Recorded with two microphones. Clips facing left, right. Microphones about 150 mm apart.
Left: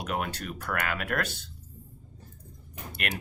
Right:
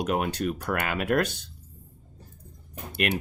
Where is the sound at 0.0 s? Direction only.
20° right (ahead or behind).